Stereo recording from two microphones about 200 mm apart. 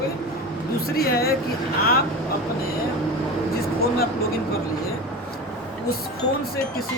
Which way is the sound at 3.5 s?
50° left (ahead or behind).